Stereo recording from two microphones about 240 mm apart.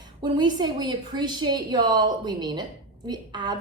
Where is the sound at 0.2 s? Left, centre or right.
Centre.